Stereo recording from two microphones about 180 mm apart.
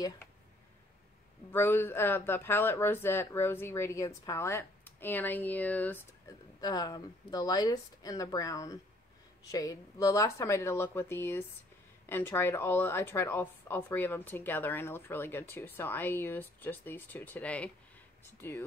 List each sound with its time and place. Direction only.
1.5 s speech: 15° left (ahead or behind)